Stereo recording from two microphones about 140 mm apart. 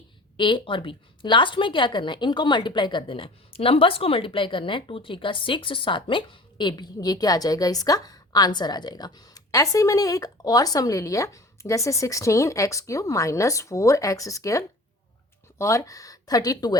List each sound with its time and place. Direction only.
0.3 s a woman's voice: 35° left (ahead or behind)